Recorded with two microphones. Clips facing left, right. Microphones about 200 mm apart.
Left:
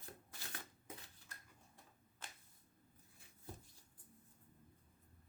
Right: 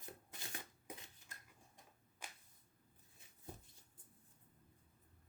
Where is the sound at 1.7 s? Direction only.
15° right (ahead or behind).